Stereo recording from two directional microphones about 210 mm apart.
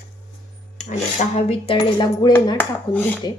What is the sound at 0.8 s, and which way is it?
Cutlery, 35° left (ahead or behind).